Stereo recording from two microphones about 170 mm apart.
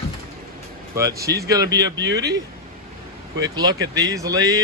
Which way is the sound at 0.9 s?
20° right (ahead or behind).